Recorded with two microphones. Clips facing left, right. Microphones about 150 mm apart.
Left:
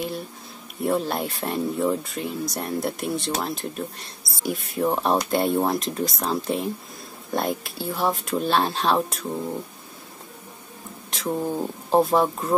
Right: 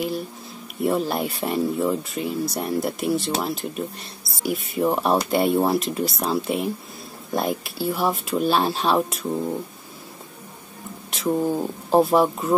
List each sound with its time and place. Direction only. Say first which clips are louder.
0.8 s speech: right 2 dB; centre (ahead or behind)
11.2 s speech: right 4 dB; 5° right (ahead or behind)